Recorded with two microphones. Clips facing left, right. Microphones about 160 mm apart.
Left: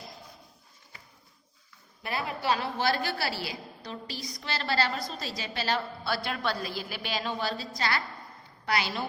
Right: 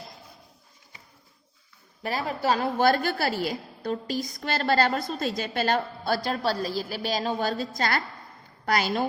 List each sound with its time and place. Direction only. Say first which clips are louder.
2.0 s a woman's voice: right 4 dB; 40° right (ahead or behind)